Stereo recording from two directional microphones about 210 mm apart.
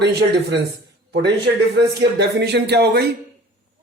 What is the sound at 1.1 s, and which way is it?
Speech, 55° right (ahead or behind).